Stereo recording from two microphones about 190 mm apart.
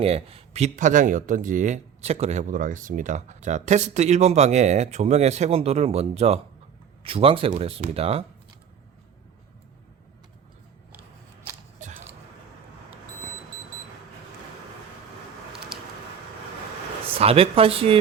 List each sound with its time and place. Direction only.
0.0 s speech: 30° right (ahead or behind)
17.1 s speech: 30° right (ahead or behind)